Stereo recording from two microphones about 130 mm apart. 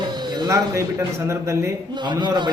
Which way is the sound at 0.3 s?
25° right (ahead or behind).